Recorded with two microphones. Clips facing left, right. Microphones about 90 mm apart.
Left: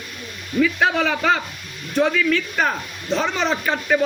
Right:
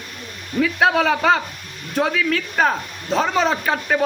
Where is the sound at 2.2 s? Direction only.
60° right (ahead or behind).